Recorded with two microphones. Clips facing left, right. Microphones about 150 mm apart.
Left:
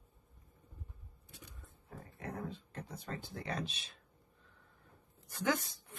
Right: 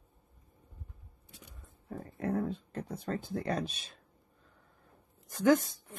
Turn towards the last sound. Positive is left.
turn(degrees=-45)  # may be behind; listen again after turning